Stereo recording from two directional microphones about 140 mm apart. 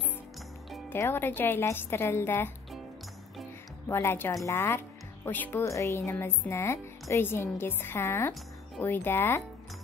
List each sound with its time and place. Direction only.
0.8 s speech: 15° left (ahead or behind)
3.9 s speech: 15° left (ahead or behind)